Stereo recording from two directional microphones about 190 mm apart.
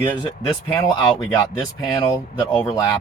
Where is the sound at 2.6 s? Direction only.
15° left (ahead or behind).